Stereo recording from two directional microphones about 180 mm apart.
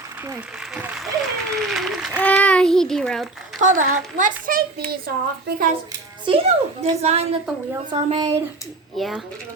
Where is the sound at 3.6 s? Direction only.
45° right (ahead or behind).